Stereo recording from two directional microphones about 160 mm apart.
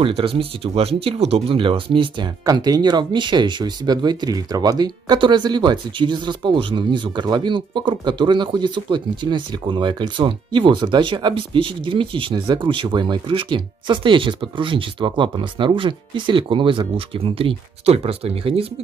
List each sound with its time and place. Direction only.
0.0 s speech: 35° right (ahead or behind)